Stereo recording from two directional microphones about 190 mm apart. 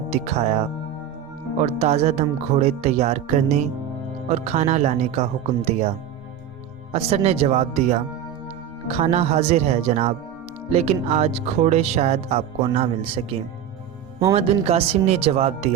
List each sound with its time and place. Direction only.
0.1 s speech: 35° right (ahead or behind)
1.6 s speech: 35° right (ahead or behind)
6.9 s speech: 30° right (ahead or behind)